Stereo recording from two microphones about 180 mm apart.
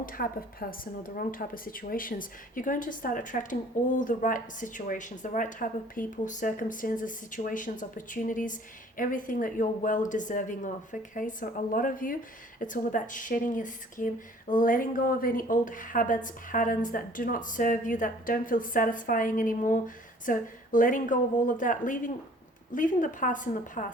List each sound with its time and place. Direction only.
0.0 s a woman's voice: 55° left (ahead or behind)